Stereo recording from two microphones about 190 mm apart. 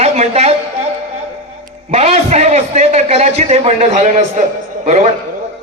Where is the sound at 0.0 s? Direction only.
35° right (ahead or behind).